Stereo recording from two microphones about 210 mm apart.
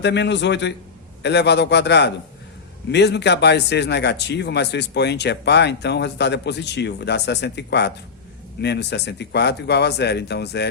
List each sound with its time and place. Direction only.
0.0 s a man's voice: 55° left (ahead or behind)